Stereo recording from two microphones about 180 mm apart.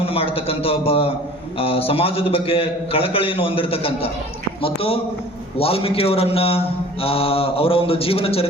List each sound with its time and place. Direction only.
0.0 s a man's voice: 30° left (ahead or behind)